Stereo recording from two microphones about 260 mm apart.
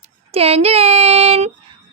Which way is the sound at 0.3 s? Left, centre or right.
Right.